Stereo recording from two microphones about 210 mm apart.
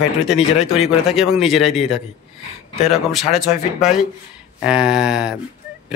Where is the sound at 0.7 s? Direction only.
Centre (ahead or behind).